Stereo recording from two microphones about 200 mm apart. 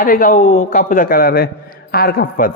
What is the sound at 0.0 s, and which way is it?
Speech, 45° left (ahead or behind).